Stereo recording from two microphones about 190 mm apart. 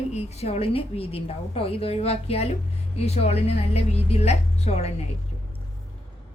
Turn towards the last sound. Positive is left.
turn(degrees=35)  # may be behind; listen again after turning